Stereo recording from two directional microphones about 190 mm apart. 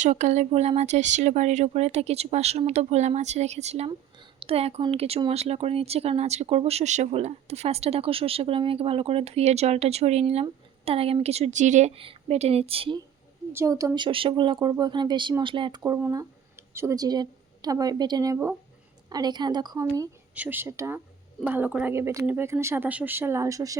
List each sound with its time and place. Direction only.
0.0 s speech: 40° right (ahead or behind)
13.5 s speech: 15° right (ahead or behind)
15.8 s speech: 15° right (ahead or behind)